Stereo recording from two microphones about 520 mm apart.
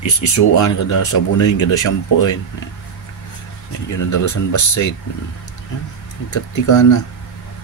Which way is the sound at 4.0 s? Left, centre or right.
Left.